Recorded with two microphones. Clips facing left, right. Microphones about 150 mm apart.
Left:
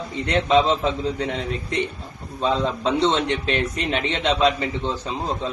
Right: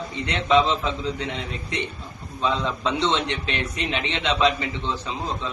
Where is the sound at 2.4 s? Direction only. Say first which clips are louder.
Left 3 dB; 40° left (ahead or behind).